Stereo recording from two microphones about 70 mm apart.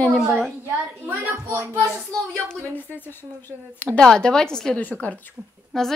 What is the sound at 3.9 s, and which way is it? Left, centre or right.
A woman's voice, centre.